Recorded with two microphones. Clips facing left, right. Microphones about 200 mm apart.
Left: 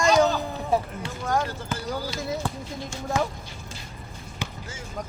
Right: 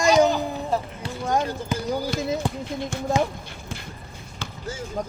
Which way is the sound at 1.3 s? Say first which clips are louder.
Right 3 dB; 20° right (ahead or behind).